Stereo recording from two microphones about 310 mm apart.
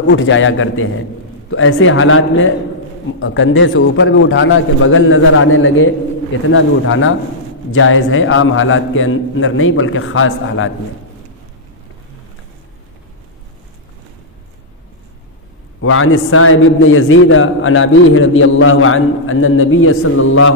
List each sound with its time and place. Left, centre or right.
0.1 s a man's voice: left
15.8 s a man's voice: left